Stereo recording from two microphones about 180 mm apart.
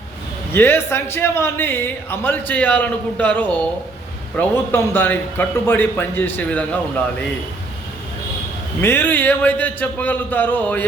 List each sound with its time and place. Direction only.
0.5 s a man's voice: 10° left (ahead or behind)
8.8 s a man's voice: 10° left (ahead or behind)